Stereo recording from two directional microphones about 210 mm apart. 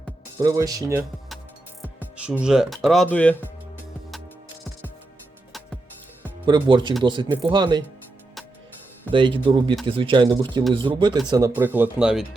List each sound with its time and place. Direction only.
0.3 s speech: 15° right (ahead or behind)
2.4 s speech: centre (ahead or behind)
6.4 s speech: 20° right (ahead or behind)
9.1 s speech: 25° right (ahead or behind); by 12.2 s 5° right (ahead or behind)